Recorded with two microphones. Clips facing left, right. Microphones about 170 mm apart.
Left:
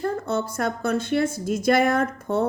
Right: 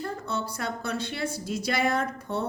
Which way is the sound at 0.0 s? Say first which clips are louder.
Left 7 dB; 50° left (ahead or behind).